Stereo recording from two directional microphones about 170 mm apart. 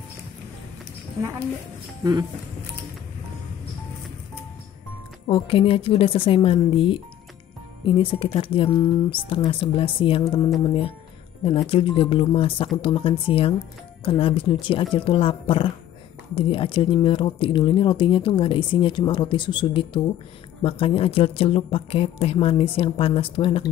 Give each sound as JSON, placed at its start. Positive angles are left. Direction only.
{"t": 5.3, "sound": "speech", "side_deg": 30}